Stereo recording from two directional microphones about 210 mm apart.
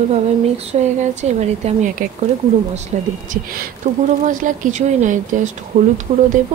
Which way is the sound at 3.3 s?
45° right (ahead or behind).